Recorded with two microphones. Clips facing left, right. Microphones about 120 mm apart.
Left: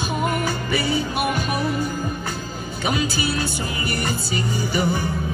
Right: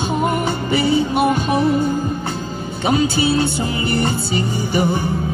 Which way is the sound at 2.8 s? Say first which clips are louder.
Right 7 dB; 30° right (ahead or behind).